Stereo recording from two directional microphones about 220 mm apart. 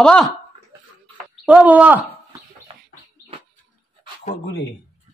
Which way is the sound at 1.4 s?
5° right (ahead or behind).